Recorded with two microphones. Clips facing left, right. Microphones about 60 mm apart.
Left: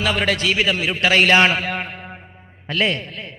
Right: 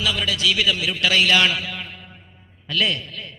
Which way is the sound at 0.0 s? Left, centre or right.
Left.